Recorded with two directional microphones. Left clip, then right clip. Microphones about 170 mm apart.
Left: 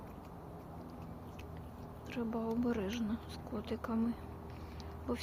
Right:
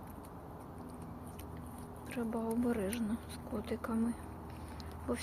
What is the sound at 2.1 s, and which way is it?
Speech, 15° left (ahead or behind).